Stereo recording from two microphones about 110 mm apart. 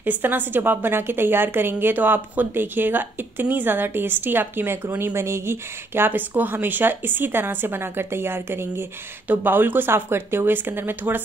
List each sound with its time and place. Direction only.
0.0 s a woman's voice: 15° right (ahead or behind)